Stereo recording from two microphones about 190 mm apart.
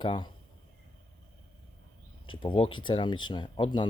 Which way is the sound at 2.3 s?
25° left (ahead or behind).